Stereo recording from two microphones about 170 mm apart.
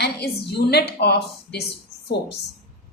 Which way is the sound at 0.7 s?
70° left (ahead or behind).